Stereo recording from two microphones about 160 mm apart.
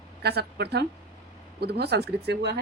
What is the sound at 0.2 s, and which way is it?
Speech, 90° right.